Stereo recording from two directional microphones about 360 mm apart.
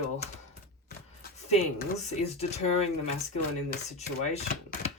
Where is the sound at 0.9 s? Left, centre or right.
Left.